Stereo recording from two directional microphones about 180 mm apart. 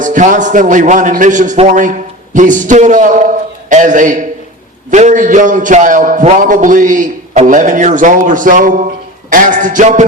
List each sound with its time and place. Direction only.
0.0 s a man's voice: 45° right (ahead or behind)